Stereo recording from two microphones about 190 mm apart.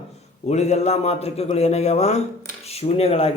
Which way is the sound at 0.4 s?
35° left (ahead or behind).